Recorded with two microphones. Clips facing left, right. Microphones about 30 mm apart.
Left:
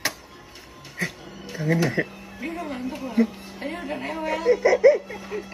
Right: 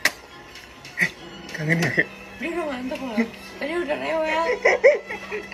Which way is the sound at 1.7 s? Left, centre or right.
Right.